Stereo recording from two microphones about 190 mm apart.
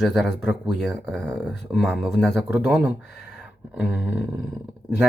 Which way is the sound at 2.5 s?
10° right (ahead or behind).